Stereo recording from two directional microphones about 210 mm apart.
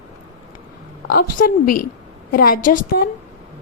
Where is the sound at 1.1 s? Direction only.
45° left (ahead or behind).